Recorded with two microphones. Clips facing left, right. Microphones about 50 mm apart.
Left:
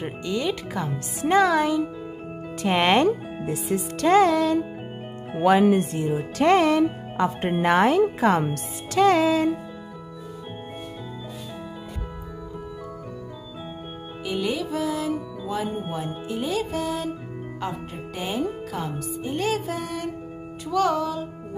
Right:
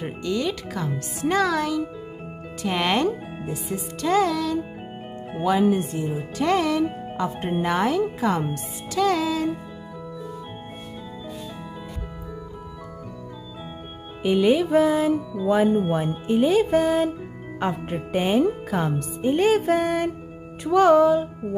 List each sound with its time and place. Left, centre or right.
0.0 s speech: centre
2.6 s speech: left
3.4 s speech: left
4.1 s speech: left
5.4 s speech: left
6.4 s speech: left
14.5 s speech: right
16.3 s music: right
16.7 s speech: right